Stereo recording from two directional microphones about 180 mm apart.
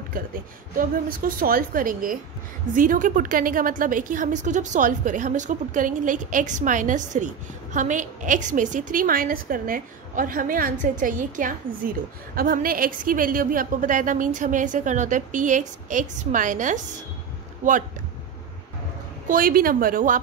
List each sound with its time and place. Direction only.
0.7 s a woman's voice: 50° right (ahead or behind)
19.2 s a woman's voice: 50° right (ahead or behind)